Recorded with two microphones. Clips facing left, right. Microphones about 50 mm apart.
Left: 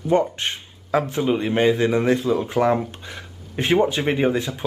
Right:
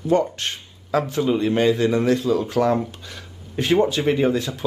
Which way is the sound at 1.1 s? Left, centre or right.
Left.